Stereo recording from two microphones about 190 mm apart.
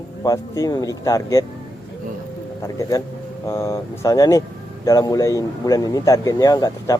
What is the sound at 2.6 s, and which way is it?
A man's voice, 15° left (ahead or behind).